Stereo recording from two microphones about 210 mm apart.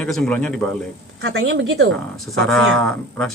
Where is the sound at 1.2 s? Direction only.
65° right (ahead or behind).